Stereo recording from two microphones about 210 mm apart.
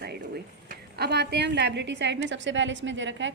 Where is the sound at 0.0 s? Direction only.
50° right (ahead or behind).